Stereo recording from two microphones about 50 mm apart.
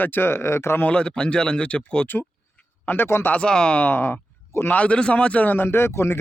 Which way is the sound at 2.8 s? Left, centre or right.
Left.